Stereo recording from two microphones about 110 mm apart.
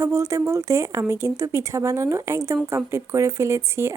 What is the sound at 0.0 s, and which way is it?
Speech, 25° right (ahead or behind).